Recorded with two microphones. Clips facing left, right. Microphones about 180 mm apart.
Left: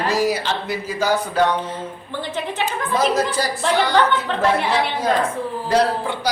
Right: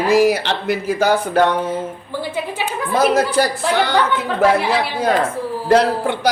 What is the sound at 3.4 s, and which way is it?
Speech, 65° right (ahead or behind).